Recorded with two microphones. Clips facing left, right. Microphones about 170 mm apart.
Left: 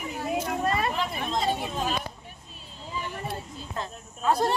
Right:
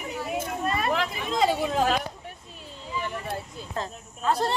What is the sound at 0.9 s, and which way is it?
Speech, 90° right.